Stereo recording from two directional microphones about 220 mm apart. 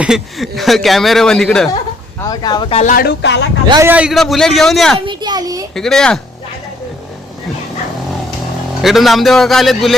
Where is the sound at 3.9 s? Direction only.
5° right (ahead or behind).